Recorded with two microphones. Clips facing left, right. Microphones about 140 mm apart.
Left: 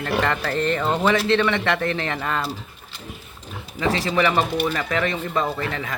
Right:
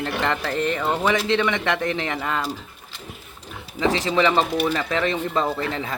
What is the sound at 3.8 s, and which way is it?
Speech, 20° right (ahead or behind).